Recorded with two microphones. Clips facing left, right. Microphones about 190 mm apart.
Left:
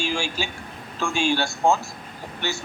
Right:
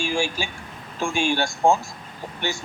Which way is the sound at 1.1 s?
50° right (ahead or behind).